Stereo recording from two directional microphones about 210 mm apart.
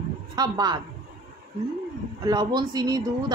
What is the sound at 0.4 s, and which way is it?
Speech, 20° right (ahead or behind).